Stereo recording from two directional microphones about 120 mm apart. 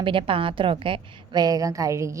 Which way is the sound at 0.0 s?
45° right (ahead or behind).